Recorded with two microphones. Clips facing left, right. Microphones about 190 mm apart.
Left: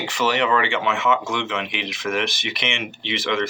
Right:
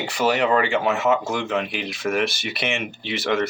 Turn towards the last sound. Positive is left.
turn(degrees=-40)  # may be behind; listen again after turning